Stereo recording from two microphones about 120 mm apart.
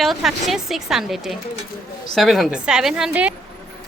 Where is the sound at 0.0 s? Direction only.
Centre (ahead or behind).